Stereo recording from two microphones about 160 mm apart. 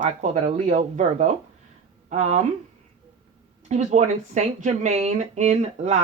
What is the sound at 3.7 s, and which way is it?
Speech, 50° right (ahead or behind).